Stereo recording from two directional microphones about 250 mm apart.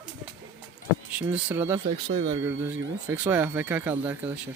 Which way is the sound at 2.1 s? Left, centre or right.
Right.